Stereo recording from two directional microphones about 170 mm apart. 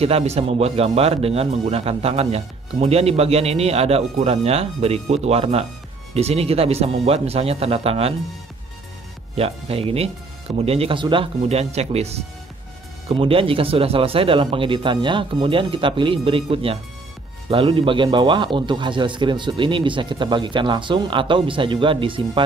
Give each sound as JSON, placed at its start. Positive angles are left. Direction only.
{"t": 0.0, "sound": "speech", "side_deg": -35}
{"t": 9.4, "sound": "a man's voice", "side_deg": -35}